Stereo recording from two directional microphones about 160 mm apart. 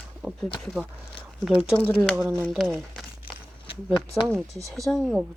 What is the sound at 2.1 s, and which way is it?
Speech, 15° right (ahead or behind).